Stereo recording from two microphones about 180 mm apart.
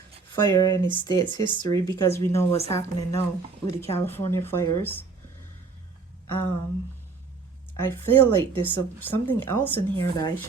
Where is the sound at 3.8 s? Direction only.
15° left (ahead or behind).